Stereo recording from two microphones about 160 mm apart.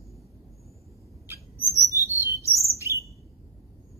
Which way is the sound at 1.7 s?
20° left (ahead or behind).